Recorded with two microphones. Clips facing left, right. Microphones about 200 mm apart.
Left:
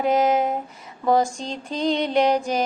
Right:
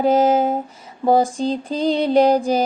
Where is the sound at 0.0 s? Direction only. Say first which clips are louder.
Right 4 dB; 30° right (ahead or behind).